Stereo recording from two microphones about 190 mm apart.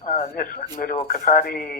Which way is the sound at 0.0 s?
40° left (ahead or behind).